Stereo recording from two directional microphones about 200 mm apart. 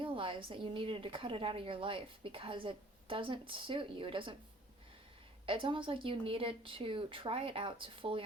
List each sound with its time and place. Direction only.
0.0 s a woman's voice: 25° right (ahead or behind)
5.5 s a woman's voice: 25° right (ahead or behind)